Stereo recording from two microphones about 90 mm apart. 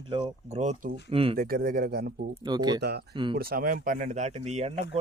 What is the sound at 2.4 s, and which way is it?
Speech, 50° right (ahead or behind).